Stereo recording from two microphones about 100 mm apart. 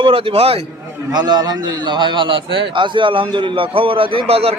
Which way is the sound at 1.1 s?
45° right (ahead or behind).